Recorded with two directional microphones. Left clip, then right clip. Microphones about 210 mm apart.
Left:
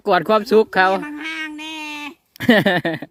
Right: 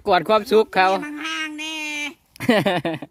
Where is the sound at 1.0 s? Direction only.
5° right (ahead or behind).